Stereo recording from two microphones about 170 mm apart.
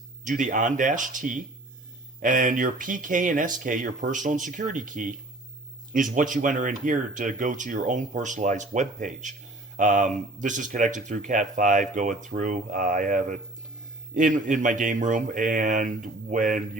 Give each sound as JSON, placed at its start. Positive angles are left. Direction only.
{"t": 0.3, "sound": "speech", "side_deg": -50}
{"t": 6.1, "sound": "speech", "side_deg": -50}